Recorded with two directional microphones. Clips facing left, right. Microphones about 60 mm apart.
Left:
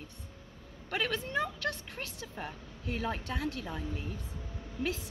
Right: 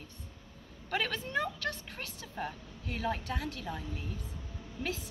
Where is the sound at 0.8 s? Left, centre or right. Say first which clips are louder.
Left 1 dB; left.